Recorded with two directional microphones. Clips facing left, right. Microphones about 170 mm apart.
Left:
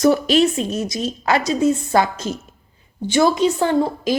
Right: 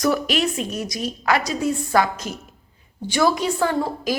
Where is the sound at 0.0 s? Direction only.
30° left (ahead or behind).